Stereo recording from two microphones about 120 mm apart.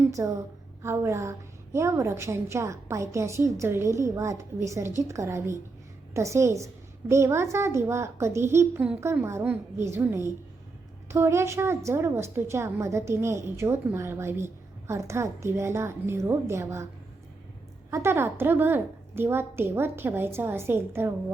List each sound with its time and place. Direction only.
0.0 s a woman's voice: 25° right (ahead or behind)
17.9 s a woman's voice: 20° right (ahead or behind)